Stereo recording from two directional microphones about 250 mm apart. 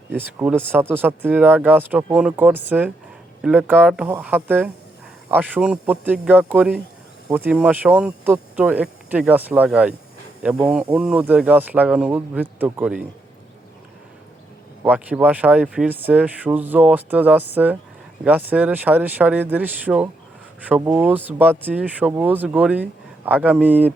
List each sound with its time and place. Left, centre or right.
0.2 s speech: centre
14.8 s speech: centre